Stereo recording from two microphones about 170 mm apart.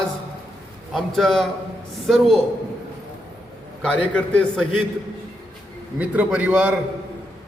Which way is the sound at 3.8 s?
5° left (ahead or behind).